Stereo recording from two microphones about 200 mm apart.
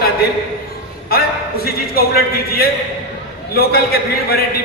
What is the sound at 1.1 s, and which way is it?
A man's voice, 50° left (ahead or behind).